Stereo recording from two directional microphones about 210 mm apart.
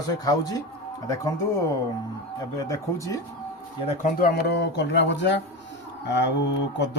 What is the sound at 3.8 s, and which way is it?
Speech, 30° left (ahead or behind).